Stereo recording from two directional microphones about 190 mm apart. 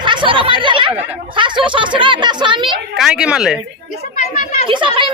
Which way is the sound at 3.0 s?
5° right (ahead or behind).